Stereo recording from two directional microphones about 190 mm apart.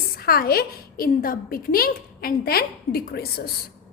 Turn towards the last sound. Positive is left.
turn(degrees=55)  # may be behind; listen again after turning